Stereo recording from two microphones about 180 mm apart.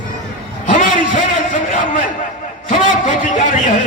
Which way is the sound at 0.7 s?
45° left (ahead or behind).